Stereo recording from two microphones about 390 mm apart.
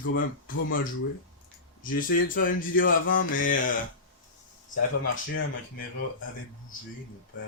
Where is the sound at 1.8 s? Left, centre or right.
Left.